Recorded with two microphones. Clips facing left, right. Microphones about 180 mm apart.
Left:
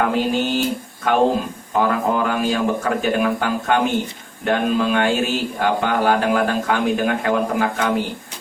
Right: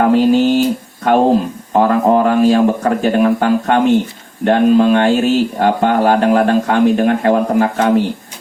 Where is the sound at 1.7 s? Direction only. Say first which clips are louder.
Right 7 dB; 40° right (ahead or behind).